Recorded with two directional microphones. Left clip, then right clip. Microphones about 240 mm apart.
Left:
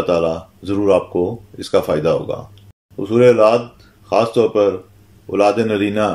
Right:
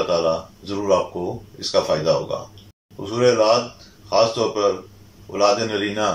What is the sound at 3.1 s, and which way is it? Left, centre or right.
Speech, left.